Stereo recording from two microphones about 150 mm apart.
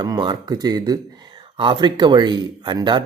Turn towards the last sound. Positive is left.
turn(degrees=-30)  # may be behind; listen again after turning